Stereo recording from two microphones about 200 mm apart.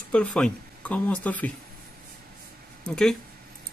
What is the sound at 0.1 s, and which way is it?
Speech, 5° left (ahead or behind).